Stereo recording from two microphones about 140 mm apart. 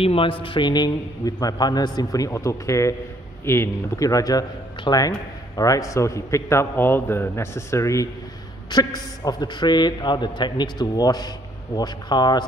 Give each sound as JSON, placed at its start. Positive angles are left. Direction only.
{"t": 0.0, "sound": "a man's voice", "side_deg": 40}